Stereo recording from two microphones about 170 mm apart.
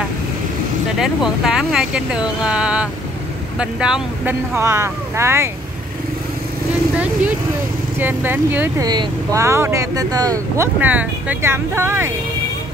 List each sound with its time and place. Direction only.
0.9 s speech: 5° right (ahead or behind)
8.0 s speech: 10° right (ahead or behind)
8.8 s speech: 25° right (ahead or behind)
10.8 s speech: 10° right (ahead or behind)